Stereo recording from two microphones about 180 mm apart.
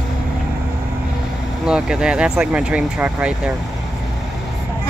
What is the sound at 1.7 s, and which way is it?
Speech, 5° right (ahead or behind).